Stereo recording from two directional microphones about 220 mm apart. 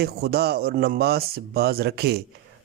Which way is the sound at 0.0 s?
45° right (ahead or behind).